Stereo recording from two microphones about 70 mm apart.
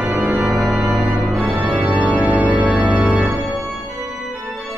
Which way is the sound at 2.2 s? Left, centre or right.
Centre.